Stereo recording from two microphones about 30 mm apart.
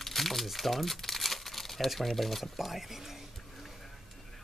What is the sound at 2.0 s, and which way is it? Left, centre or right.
Speech, centre.